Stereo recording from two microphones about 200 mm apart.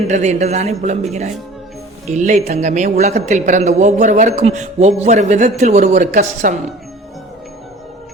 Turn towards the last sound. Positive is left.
turn(degrees=-40)  # may be behind; listen again after turning